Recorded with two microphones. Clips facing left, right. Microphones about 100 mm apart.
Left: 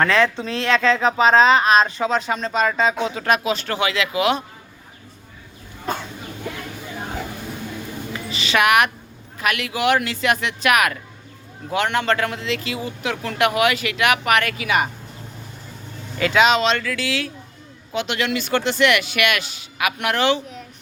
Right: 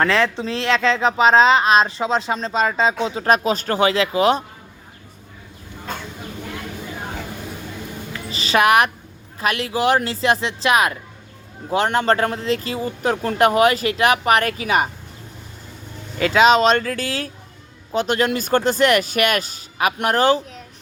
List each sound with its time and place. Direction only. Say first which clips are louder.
0.0 s speech: even; 25° right (ahead or behind)
8.3 s a sound: right 2 dB; 35° right (ahead or behind)
9.4 s speech: right 2 dB; 30° right (ahead or behind)
16.1 s speech: right 3 dB; 35° right (ahead or behind)